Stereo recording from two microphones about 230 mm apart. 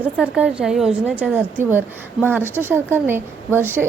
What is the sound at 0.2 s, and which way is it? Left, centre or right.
A woman's voice, centre.